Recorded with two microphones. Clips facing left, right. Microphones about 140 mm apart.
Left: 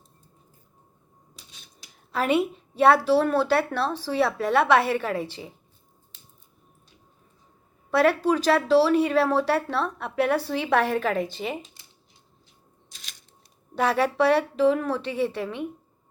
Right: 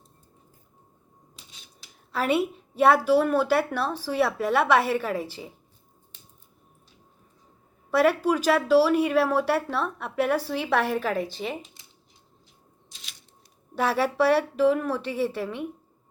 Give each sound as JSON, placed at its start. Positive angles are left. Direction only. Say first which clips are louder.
{"t": 2.1, "sound": "speech", "louder": "left 1 dB", "side_deg": -5}
{"t": 7.9, "sound": "speech", "louder": "left 1 dB", "side_deg": -10}
{"t": 12.9, "sound": "a sound", "louder": "left 1 dB", "side_deg": 45}
{"t": 13.7, "sound": "speech", "louder": "left 1 dB", "side_deg": -10}